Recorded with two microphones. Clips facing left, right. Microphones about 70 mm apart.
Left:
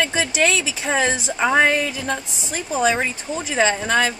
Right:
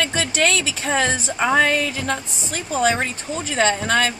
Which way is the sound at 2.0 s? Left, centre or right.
Centre.